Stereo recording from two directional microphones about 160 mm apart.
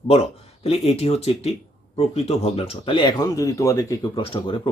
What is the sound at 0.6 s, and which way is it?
Speech, 40° left (ahead or behind).